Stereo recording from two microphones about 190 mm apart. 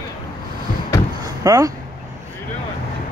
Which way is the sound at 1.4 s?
20° right (ahead or behind).